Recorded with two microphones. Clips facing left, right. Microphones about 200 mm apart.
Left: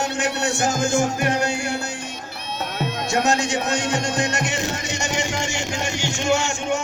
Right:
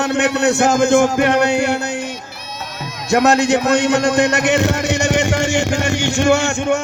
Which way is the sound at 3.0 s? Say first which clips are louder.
Right 9 dB; 60° right (ahead or behind).